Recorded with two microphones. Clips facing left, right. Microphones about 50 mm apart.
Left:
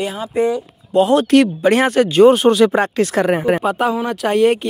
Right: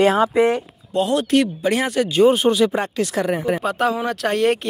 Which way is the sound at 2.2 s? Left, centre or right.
Left.